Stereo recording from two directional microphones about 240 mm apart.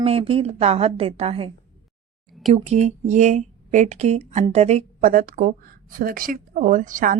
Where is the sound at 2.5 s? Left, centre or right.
Right.